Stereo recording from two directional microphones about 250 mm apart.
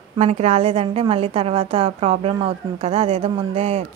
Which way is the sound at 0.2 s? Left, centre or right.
Right.